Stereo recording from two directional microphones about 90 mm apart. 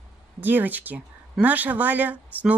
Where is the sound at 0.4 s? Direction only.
20° right (ahead or behind).